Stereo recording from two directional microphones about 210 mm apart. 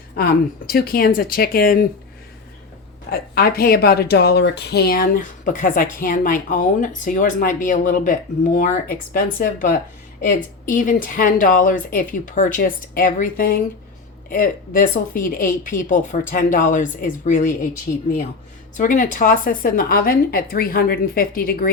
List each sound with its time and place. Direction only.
0.7 s speech: 45° left (ahead or behind)
3.1 s a woman's voice: 45° left (ahead or behind)